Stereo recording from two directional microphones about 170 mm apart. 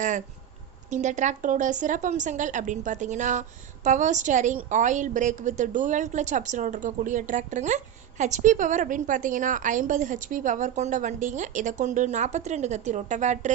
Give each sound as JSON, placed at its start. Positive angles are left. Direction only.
{"t": 0.9, "sound": "a woman's voice", "side_deg": -45}